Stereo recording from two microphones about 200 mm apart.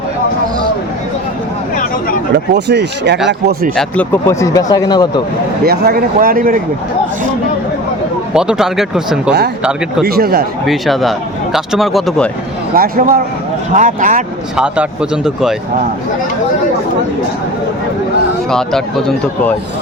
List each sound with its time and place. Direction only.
2.3 s speech: 55° right (ahead or behind)
3.8 s speech: 10° left (ahead or behind)
5.6 s speech: 50° right (ahead or behind)
8.3 s speech: 5° right (ahead or behind)
10.0 s speech: 50° right (ahead or behind)
10.7 s speech: centre (ahead or behind)
12.7 s speech: 45° right (ahead or behind)
14.5 s speech: 5° right (ahead or behind)
18.5 s speech: 5° left (ahead or behind)